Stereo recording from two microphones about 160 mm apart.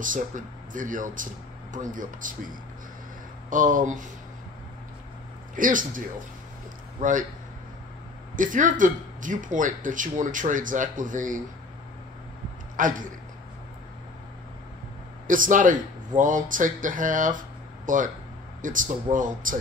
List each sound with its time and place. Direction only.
0.7 s speech: 55° right (ahead or behind)
5.6 s speech: 55° right (ahead or behind)
8.4 s speech: 55° right (ahead or behind)
12.8 s speech: 55° right (ahead or behind)
15.2 s speech: 55° right (ahead or behind)